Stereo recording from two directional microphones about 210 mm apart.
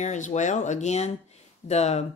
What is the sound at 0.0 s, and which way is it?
Speech, 35° left (ahead or behind).